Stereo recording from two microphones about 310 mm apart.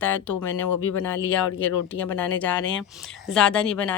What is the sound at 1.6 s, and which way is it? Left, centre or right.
A woman's voice, centre.